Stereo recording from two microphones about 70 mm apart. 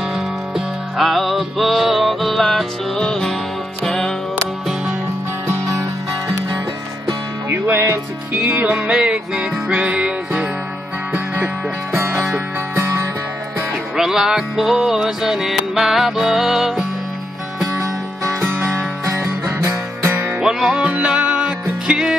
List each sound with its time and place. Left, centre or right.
0.1 s music: centre
5.7 s music: right
7.4 s music: right
8.4 s music: right
13.9 s music: centre
18.4 s music: right
19.0 s music: right
20.3 s music: centre